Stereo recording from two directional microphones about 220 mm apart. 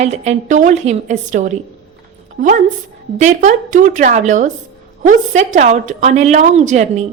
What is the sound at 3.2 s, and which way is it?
A woman's voice, 35° right (ahead or behind).